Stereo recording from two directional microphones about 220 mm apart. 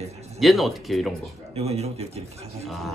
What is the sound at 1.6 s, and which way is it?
A man's voice, 30° right (ahead or behind).